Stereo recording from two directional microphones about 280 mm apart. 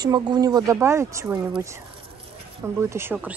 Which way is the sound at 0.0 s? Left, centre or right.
Centre.